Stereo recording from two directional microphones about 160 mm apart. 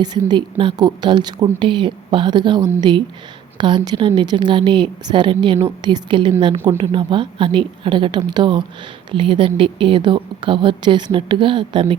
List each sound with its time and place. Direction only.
0.0 s a woman's voice: 25° right (ahead or behind)